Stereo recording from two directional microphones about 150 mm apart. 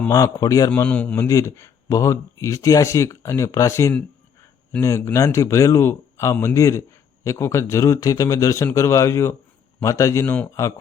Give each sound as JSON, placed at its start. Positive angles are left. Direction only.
{"t": 0.1, "sound": "speech", "side_deg": 20}
{"t": 0.8, "sound": "speech", "side_deg": 10}